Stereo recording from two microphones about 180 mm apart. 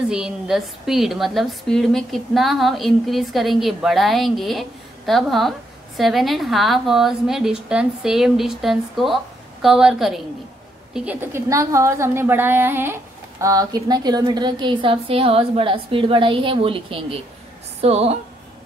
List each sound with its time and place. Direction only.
0.1 s a woman's voice: 5° right (ahead or behind); by 18.1 s 35° right (ahead or behind)